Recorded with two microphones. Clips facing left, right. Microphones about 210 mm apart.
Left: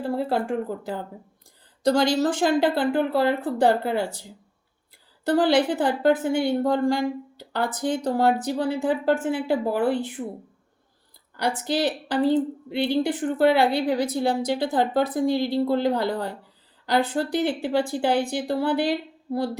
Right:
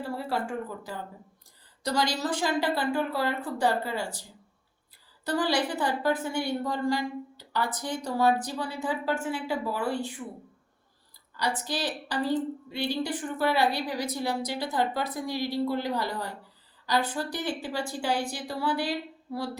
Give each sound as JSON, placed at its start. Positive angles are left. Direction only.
{"t": 0.1, "sound": "a woman's voice", "side_deg": 60}
{"t": 10.2, "sound": "speech", "side_deg": 40}
{"t": 11.3, "sound": "a woman's voice", "side_deg": 55}